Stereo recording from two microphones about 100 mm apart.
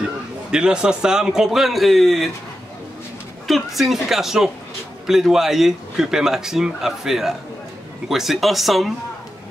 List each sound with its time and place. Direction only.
0.0 s a man's voice: 10° right (ahead or behind)
3.4 s speech: centre (ahead or behind)